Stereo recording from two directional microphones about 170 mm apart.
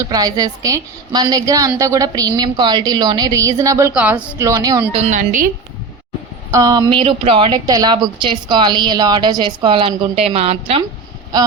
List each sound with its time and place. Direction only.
0.0 s a woman's voice: 20° right (ahead or behind)
3.9 s speech: 10° right (ahead or behind)
4.4 s a woman's voice: 20° right (ahead or behind)
4.9 s a woman's voice: 40° right (ahead or behind)
6.5 s a woman's voice: 20° right (ahead or behind)